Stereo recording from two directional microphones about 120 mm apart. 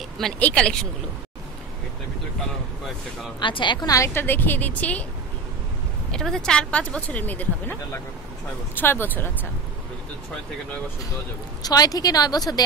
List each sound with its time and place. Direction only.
0.2 s speech: 10° left (ahead or behind)
3.3 s a woman's voice: 40° left (ahead or behind); by 5.0 s 10° left (ahead or behind)
6.1 s speech: 5° left (ahead or behind)
11.6 s speech: 30° left (ahead or behind)